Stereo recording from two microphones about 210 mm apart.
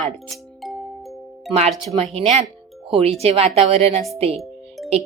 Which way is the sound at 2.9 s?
30° right (ahead or behind).